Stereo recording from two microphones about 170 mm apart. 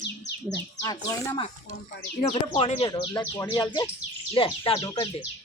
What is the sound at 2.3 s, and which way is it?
Speech, 35° left (ahead or behind).